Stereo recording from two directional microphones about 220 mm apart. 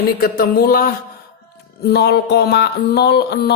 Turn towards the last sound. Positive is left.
turn(degrees=50)  # may be behind; listen again after turning